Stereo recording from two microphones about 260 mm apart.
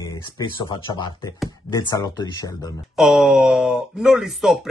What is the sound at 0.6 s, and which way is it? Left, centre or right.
Speech, centre.